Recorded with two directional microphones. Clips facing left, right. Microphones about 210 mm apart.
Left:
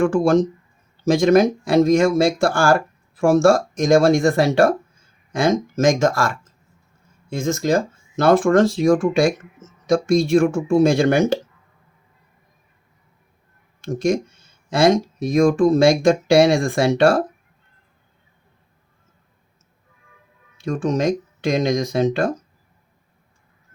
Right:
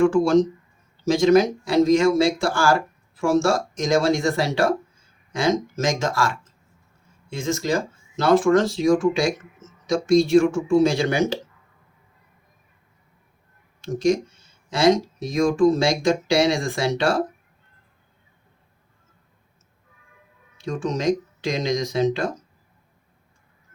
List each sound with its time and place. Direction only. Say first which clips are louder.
0.0 s speech: even; 50° left (ahead or behind)
13.8 s speech: even; 50° left (ahead or behind)
20.6 s speech: left 5 dB; 50° left (ahead or behind)